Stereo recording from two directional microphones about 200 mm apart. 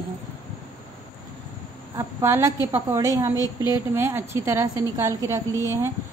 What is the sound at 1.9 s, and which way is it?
A woman's voice, 15° right (ahead or behind).